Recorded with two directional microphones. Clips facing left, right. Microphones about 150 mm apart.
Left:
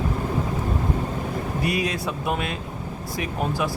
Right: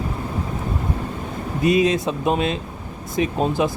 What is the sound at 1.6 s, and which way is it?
Speech, 20° right (ahead or behind).